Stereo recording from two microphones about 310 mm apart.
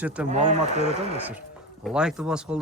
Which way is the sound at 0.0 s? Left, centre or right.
Centre.